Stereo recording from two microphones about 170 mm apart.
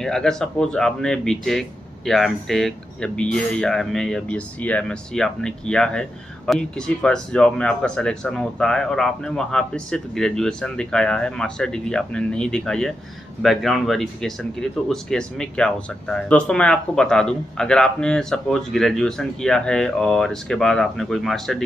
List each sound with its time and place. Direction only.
0.0 s speech: 5° left (ahead or behind)